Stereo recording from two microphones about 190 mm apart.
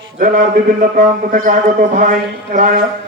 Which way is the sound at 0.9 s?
45° right (ahead or behind).